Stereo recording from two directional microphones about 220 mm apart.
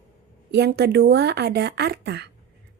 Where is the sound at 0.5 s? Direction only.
45° right (ahead or behind).